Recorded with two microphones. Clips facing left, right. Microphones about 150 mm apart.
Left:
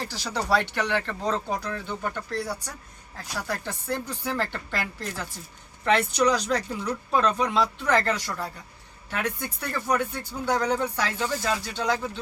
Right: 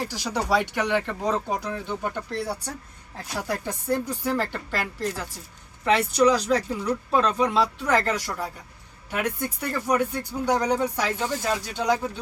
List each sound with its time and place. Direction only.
0.0 s speech: 15° right (ahead or behind)
5.8 s speech: 5° right (ahead or behind)